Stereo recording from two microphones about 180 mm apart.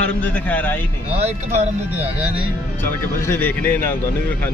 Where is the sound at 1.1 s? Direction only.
35° right (ahead or behind).